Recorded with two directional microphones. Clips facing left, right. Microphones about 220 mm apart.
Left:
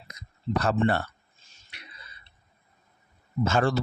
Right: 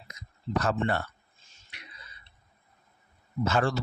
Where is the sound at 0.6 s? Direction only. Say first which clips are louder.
Left 5 dB; 30° left (ahead or behind).